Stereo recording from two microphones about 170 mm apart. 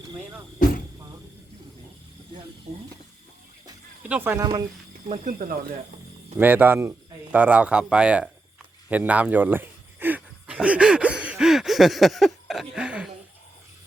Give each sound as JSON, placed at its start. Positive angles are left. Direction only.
{"t": 2.7, "sound": "speech", "side_deg": -40}
{"t": 4.1, "sound": "speech", "side_deg": -10}
{"t": 5.0, "sound": "speech", "side_deg": -40}
{"t": 6.4, "sound": "speech", "side_deg": -10}
{"t": 8.9, "sound": "a sound", "side_deg": -10}